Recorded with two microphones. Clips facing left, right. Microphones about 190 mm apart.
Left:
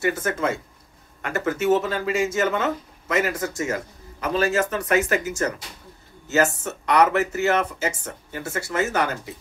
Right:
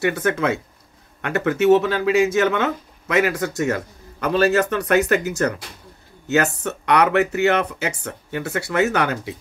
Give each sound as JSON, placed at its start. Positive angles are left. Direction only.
{"t": 0.0, "sound": "speech", "side_deg": -65}